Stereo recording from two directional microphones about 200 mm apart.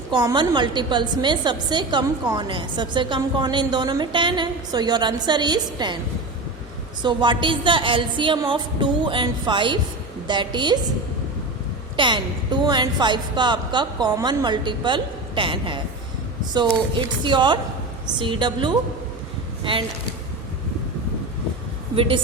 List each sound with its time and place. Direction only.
0.1 s a woman's voice: 20° right (ahead or behind)
7.0 s a woman's voice: 25° right (ahead or behind)
11.9 s a woman's voice: 25° right (ahead or behind)
17.2 s a woman's voice: 25° right (ahead or behind)
21.9 s a woman's voice: 25° right (ahead or behind)